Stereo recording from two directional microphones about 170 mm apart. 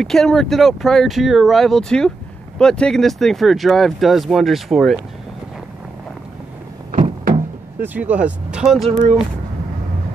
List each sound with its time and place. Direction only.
0.0 s speech: 5° left (ahead or behind)
6.9 s a sound: 45° right (ahead or behind)
7.8 s speech: 10° right (ahead or behind)